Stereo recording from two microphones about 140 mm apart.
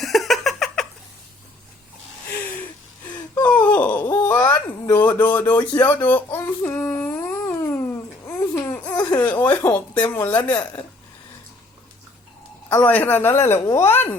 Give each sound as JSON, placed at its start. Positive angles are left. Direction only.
{"t": 0.0, "sound": "giggle", "side_deg": 0}
{"t": 3.4, "sound": "groan", "side_deg": 10}
{"t": 4.0, "sound": "a sound", "side_deg": 15}
{"t": 4.9, "sound": "a woman's voice", "side_deg": 15}
{"t": 5.8, "sound": "a sound", "side_deg": 15}
{"t": 8.3, "sound": "baby cry", "side_deg": 15}
{"t": 9.1, "sound": "a woman's voice", "side_deg": 15}
{"t": 12.6, "sound": "a woman's voice", "side_deg": 10}